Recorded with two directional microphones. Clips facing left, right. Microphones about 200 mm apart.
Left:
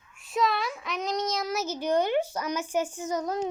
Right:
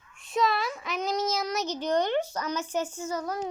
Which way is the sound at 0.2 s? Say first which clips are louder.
Even; centre (ahead or behind).